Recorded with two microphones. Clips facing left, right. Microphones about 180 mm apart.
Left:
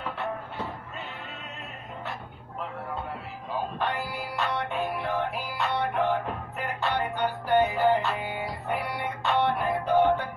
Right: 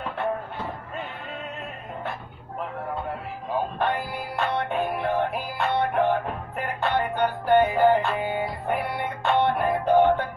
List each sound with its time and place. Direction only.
3.7 s music: 55° right (ahead or behind)